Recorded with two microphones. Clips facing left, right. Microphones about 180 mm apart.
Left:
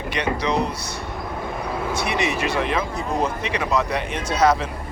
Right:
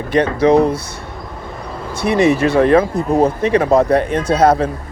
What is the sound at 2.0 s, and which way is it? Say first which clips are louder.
Speech: right 13 dB; 55° right (ahead or behind).